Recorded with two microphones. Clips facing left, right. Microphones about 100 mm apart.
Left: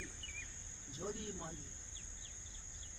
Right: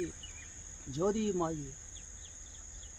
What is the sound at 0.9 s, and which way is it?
Cricket, 85° right.